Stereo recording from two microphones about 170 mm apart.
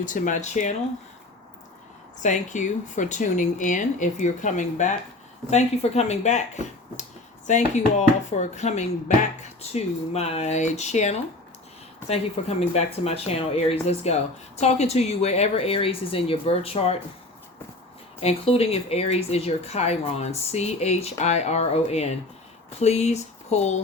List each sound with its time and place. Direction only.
0.0 s speech: 50° left (ahead or behind)
2.2 s speech: 45° left (ahead or behind)
18.2 s speech: 35° left (ahead or behind)